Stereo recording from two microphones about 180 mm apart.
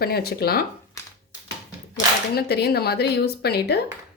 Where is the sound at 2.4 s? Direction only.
60° left (ahead or behind).